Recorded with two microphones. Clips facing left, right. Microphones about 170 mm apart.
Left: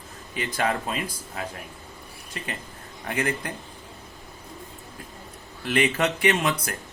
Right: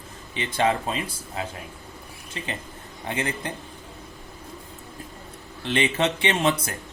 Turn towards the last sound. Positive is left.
turn(degrees=-25)  # may be behind; listen again after turning